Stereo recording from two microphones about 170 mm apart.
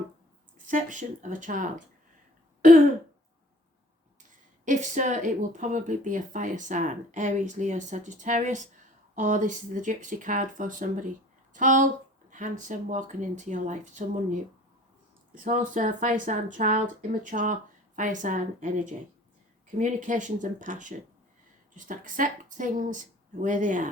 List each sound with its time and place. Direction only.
0.7 s speech: 50° right (ahead or behind)
4.6 s speech: 50° right (ahead or behind)
15.4 s speech: 50° right (ahead or behind)